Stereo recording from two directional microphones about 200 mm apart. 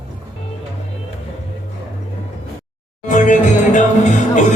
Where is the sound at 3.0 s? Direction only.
40° left (ahead or behind).